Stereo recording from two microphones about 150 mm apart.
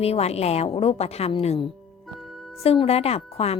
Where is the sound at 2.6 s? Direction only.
40° left (ahead or behind).